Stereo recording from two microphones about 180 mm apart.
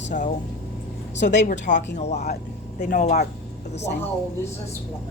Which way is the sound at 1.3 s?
40° left (ahead or behind).